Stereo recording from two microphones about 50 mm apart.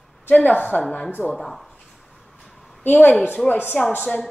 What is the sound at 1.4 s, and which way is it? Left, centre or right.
Speech, centre.